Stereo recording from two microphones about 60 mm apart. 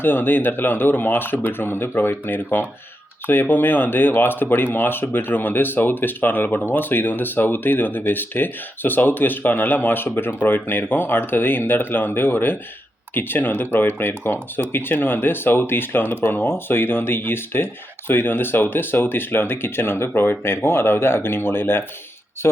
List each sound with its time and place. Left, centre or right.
0.0 s speech: left